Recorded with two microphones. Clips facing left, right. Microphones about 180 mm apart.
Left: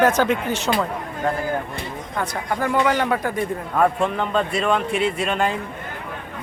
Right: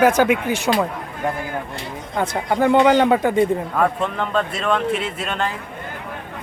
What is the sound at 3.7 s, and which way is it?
Speech, 5° left (ahead or behind).